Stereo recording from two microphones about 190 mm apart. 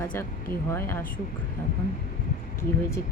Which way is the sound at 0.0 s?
10° left (ahead or behind).